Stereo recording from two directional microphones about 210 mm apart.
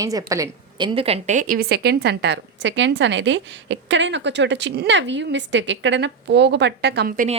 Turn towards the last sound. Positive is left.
turn(degrees=-45)  # may be behind; listen again after turning